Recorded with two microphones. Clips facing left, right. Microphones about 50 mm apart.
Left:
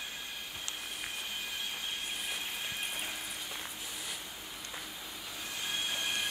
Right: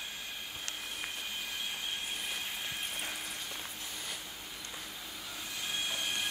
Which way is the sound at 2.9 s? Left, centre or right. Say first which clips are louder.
Even; centre.